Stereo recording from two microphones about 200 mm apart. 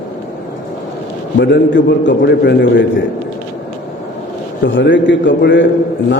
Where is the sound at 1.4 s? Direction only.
60° left (ahead or behind).